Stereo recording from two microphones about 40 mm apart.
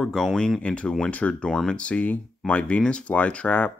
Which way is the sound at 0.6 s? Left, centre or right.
Left.